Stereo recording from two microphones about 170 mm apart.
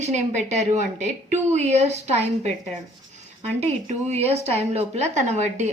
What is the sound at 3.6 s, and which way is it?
A woman's voice, 40° right (ahead or behind).